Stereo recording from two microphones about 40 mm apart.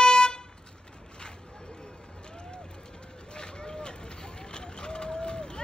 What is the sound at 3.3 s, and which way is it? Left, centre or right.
Run, centre.